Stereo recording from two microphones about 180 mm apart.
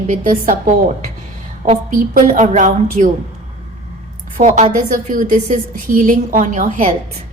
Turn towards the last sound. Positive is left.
turn(degrees=-45)  # may be behind; listen again after turning